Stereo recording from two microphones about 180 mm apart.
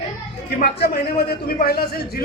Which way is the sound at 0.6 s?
60° left (ahead or behind).